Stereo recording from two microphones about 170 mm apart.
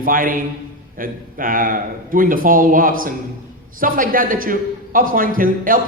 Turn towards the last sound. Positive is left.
turn(degrees=-55)  # may be behind; listen again after turning